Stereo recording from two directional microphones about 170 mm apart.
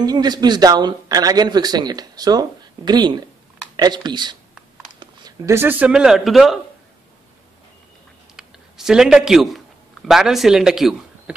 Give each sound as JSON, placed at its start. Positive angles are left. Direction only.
{"t": 0.0, "sound": "speech", "side_deg": -25}
{"t": 8.4, "sound": "a sound", "side_deg": -5}
{"t": 10.0, "sound": "speech", "side_deg": 0}